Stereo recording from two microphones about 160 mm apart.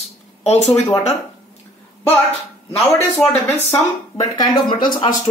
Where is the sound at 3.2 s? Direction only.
15° left (ahead or behind).